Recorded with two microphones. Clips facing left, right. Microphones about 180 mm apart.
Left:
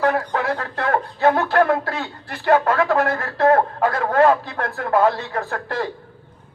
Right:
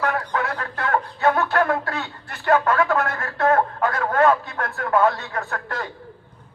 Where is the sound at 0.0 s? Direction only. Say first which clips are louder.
Left 4 dB; 30° left (ahead or behind).